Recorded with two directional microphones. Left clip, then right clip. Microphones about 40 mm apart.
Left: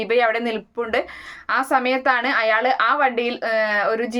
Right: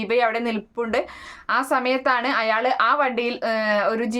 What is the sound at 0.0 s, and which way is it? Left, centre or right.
A woman's voice, right.